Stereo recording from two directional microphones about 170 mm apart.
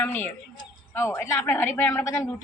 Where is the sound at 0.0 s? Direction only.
10° left (ahead or behind).